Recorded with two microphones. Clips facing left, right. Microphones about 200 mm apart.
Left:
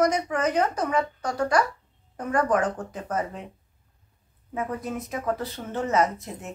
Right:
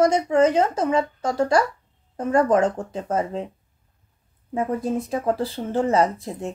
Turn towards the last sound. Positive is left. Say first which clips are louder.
# right 5 dB
turn(degrees=-30)  # may be behind; listen again after turning